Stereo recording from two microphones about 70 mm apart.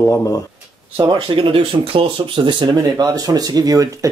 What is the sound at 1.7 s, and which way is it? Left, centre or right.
Speech, right.